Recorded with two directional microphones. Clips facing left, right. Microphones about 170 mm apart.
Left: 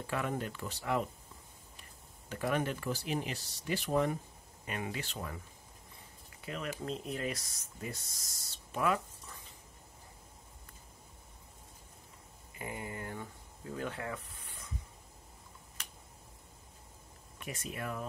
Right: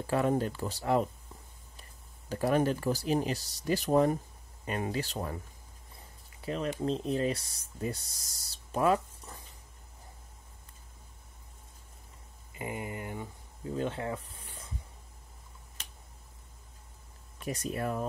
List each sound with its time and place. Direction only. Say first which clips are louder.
0.0 s speech: right 8 dB; 35° right (ahead or behind)
2.2 s speech: right 6 dB; 35° right (ahead or behind)
6.4 s speech: right 7 dB; 30° right (ahead or behind)
12.5 s a sound: right 4 dB; 20° right (ahead or behind)
17.5 s speech: right 7 dB; 40° right (ahead or behind)